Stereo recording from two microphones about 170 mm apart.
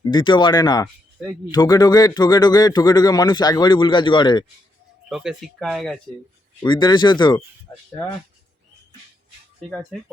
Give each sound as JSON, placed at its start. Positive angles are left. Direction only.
{"t": 0.0, "sound": "a man's voice", "side_deg": 25}
{"t": 5.0, "sound": "speech", "side_deg": -5}
{"t": 6.7, "sound": "a man's voice", "side_deg": 25}